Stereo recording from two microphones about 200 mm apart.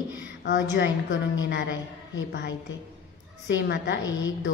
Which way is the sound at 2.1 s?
60° left (ahead or behind).